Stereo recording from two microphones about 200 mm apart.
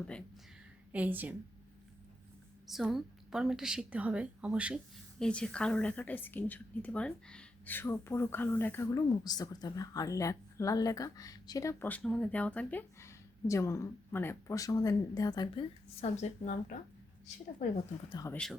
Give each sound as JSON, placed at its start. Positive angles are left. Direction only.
{"t": 0.9, "sound": "a woman's voice", "side_deg": -10}
{"t": 2.6, "sound": "a woman's voice", "side_deg": 0}
{"t": 18.1, "sound": "a woman's voice", "side_deg": 15}